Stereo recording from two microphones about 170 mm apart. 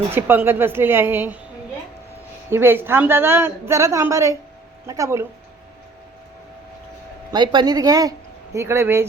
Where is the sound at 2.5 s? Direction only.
15° right (ahead or behind).